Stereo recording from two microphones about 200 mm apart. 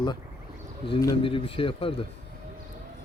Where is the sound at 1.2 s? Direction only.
25° left (ahead or behind).